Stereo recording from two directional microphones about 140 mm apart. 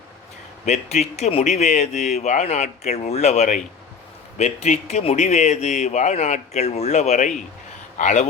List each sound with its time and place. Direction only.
0.6 s a man's voice: 55° left (ahead or behind)